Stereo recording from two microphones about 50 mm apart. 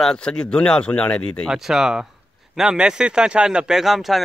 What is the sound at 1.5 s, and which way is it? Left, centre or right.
Speech, centre.